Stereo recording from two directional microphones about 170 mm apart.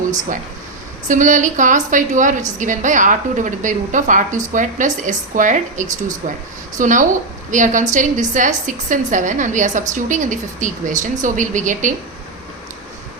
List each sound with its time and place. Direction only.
1.0 s a woman's voice: 50° right (ahead or behind)